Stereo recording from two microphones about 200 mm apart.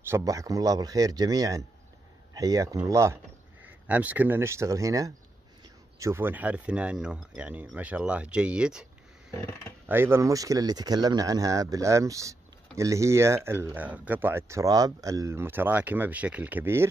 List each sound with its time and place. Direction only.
0.1 s speech: 15° right (ahead or behind)
9.8 s speech: 10° right (ahead or behind)